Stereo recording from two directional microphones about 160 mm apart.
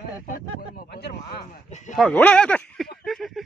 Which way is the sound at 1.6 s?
45° left (ahead or behind).